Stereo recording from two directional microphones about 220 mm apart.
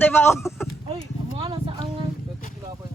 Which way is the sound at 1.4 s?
25° right (ahead or behind).